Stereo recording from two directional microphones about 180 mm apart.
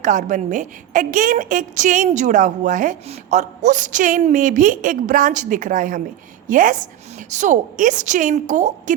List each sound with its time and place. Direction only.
0.0 s a woman's voice: 45° right (ahead or behind)